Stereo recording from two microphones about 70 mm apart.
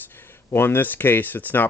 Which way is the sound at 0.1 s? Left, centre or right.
Left.